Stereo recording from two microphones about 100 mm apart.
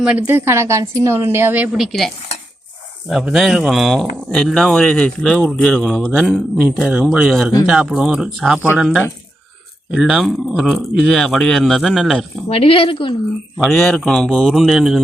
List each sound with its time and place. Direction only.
0.3 s a woman's voice: 25° right (ahead or behind)
1.7 s speech: centre (ahead or behind)
9.9 s speech: 5° right (ahead or behind)
12.5 s a woman's voice: 70° left (ahead or behind)
13.6 s speech: 5° left (ahead or behind)